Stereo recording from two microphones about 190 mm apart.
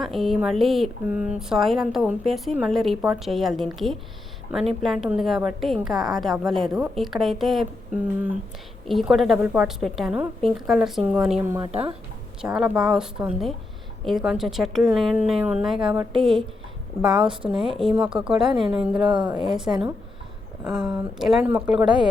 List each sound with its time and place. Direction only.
0.0 s a woman's voice: centre (ahead or behind)
11.7 s speech: 30° right (ahead or behind)
12.4 s a woman's voice: 5° right (ahead or behind)
16.0 s a woman's voice: 25° right (ahead or behind)
17.0 s a woman's voice: 5° right (ahead or behind)
18.3 s a woman's voice: 25° right (ahead or behind)
20.7 s a woman's voice: 5° right (ahead or behind)